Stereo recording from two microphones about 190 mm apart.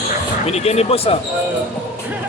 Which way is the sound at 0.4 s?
35° left (ahead or behind).